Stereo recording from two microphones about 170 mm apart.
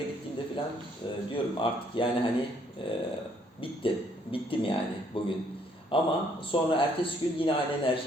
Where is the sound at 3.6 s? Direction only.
30° left (ahead or behind).